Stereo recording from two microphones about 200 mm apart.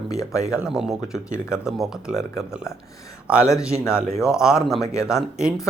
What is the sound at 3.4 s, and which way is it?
Speech, 15° left (ahead or behind).